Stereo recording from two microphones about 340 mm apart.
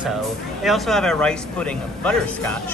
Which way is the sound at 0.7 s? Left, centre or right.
Centre.